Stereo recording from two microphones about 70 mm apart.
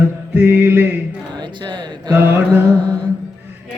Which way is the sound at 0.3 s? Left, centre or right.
Right.